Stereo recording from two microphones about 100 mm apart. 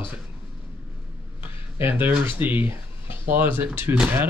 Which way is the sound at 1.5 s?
20° right (ahead or behind).